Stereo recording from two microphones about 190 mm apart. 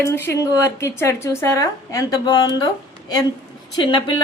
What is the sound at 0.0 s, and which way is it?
A woman's voice, 15° left (ahead or behind).